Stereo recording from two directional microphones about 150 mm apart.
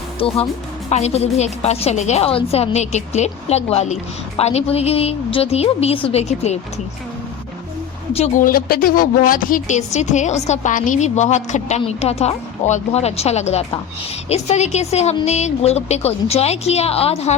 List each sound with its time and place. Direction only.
0.2 s a woman's voice: 40° left (ahead or behind)
8.4 s a woman's voice: 75° left (ahead or behind); by 17.3 s 40° left (ahead or behind)